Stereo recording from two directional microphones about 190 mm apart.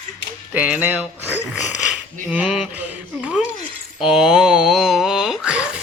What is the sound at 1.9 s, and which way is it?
Speech, 5° right (ahead or behind).